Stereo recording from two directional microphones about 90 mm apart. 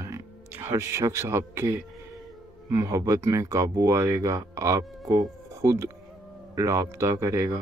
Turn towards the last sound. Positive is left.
turn(degrees=-35)  # may be behind; listen again after turning